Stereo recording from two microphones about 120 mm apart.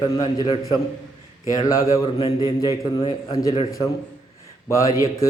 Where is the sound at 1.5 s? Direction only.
30° left (ahead or behind).